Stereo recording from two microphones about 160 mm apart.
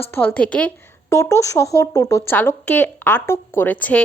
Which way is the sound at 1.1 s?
20° left (ahead or behind).